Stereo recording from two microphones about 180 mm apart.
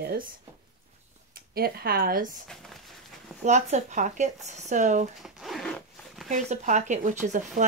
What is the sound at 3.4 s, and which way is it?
Speech, 40° right (ahead or behind).